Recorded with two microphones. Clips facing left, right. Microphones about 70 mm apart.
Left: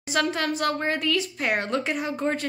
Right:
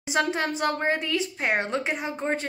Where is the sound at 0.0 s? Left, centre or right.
Right.